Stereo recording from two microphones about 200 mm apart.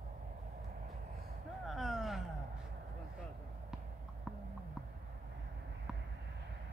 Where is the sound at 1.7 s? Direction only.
Centre (ahead or behind).